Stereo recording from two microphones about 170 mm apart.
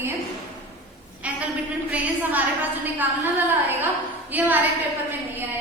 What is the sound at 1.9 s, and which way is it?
Speech, 10° right (ahead or behind).